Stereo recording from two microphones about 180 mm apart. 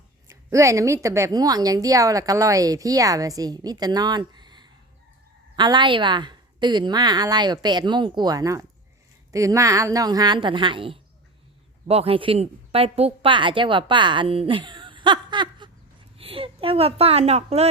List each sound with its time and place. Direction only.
0.3 s a woman's voice: 15° right (ahead or behind); by 17.7 s 35° right (ahead or behind)